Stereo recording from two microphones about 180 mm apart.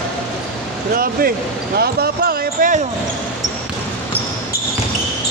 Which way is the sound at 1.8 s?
60° right (ahead or behind).